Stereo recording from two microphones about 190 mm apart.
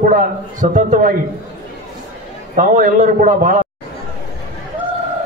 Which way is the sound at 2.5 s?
40° right (ahead or behind).